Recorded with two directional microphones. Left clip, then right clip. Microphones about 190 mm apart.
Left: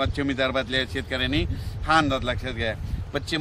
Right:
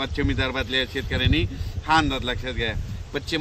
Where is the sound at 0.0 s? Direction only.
30° left (ahead or behind).